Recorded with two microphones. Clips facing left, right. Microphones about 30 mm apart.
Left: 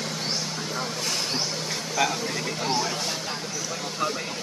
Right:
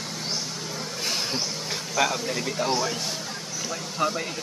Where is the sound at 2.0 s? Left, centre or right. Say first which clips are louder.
Right 1 dB; centre.